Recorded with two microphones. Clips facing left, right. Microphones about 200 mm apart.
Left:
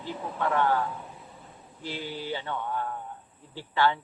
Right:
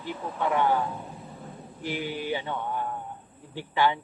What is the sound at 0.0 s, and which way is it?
Speech, 15° right (ahead or behind).